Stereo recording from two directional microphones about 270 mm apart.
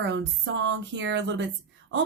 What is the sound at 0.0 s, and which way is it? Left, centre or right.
A woman's voice, right.